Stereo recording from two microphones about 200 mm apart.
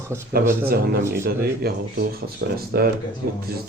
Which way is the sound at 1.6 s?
50° right (ahead or behind).